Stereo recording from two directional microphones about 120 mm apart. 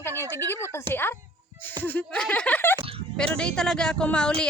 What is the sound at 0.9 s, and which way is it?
A woman's voice, 20° left (ahead or behind).